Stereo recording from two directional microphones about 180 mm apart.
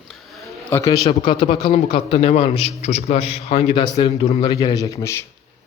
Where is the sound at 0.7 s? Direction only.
20° left (ahead or behind).